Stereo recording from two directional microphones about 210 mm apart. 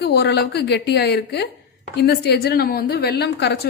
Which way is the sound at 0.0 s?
50° left (ahead or behind).